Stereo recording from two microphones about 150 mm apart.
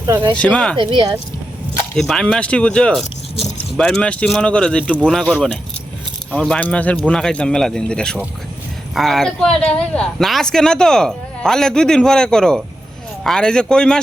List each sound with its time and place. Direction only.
0.0 s speech: 30° right (ahead or behind)
0.3 s speech: 5° left (ahead or behind)
0.8 s speech: 35° right (ahead or behind)
2.0 s speech: 5° left (ahead or behind)